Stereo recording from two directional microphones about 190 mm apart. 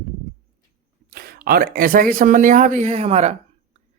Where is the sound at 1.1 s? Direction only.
50° right (ahead or behind); by 3.3 s 35° right (ahead or behind).